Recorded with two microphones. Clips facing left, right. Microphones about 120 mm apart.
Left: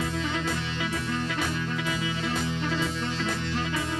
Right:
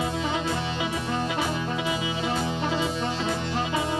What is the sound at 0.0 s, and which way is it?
Music, 20° right (ahead or behind).